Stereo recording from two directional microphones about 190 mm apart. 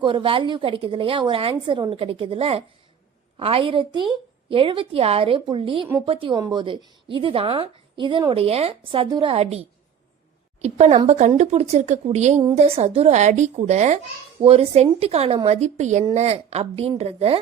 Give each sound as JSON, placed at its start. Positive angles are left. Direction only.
{"t": 0.0, "sound": "a woman's voice", "side_deg": -25}